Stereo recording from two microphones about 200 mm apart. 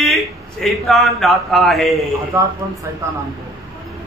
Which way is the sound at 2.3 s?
15° right (ahead or behind).